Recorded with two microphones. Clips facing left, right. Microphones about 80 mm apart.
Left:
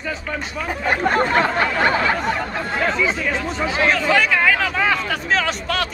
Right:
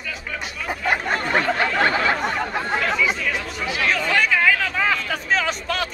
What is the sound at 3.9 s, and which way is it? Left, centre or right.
Chatter, centre.